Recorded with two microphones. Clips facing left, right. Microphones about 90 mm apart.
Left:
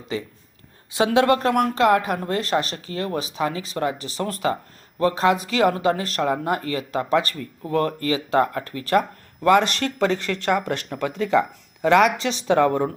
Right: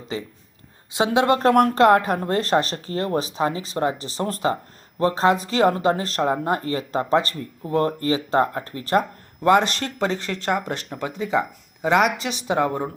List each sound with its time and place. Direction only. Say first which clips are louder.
0.1 s speech: left 2 dB; 20° right (ahead or behind)
1.4 s speech: right 4 dB; 45° right (ahead or behind); by 10.5 s 30° right (ahead or behind)
11.0 s speech: left 3 dB; 15° right (ahead or behind)